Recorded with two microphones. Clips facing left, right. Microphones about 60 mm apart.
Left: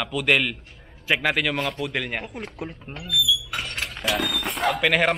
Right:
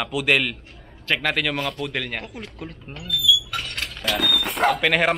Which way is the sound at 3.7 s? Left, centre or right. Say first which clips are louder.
Left 1 dB; centre.